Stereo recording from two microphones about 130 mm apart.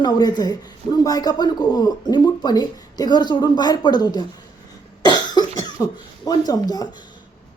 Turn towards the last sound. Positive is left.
turn(degrees=30)  # may be behind; listen again after turning